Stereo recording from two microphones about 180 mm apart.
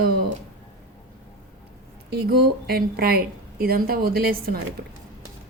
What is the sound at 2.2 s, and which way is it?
A woman's voice, 60° right (ahead or behind).